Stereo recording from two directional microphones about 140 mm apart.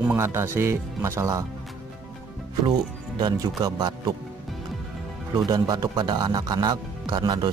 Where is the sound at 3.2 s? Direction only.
30° right (ahead or behind).